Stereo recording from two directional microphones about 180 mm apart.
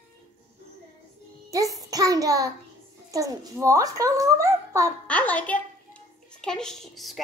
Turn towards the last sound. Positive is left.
turn(degrees=0)  # may be behind; listen again after turning